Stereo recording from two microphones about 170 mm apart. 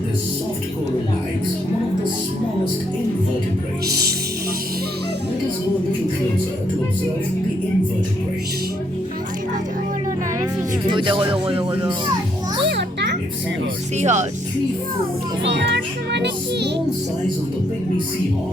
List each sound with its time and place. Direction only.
3.8 s music: 70° right (ahead or behind)
10.4 s speech: 30° right (ahead or behind)
12.6 s music: 80° right
13.9 s speech: 45° right (ahead or behind)
15.4 s a child's voice: 90° right